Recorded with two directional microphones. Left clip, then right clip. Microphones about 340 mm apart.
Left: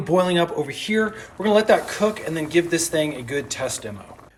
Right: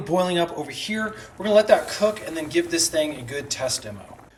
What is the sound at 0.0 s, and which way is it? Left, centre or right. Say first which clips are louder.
Speech: left 3 dB; centre.